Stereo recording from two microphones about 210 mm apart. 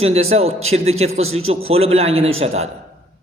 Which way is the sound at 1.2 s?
75° right (ahead or behind).